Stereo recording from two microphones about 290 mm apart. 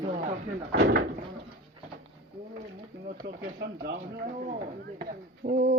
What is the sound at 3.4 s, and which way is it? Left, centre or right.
A woman's voice, right.